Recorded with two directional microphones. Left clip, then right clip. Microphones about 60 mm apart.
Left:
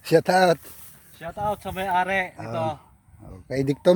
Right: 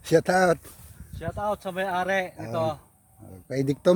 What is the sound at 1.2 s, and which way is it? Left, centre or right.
Speech, right.